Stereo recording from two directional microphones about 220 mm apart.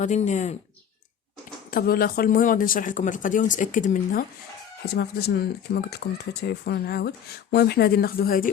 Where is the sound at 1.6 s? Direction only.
40° left (ahead or behind).